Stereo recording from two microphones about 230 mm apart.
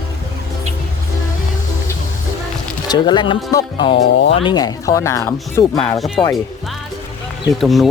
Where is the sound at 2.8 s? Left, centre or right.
Centre.